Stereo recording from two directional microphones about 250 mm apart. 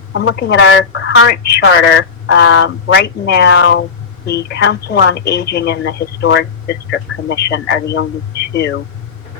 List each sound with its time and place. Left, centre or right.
0.1 s a woman's voice: left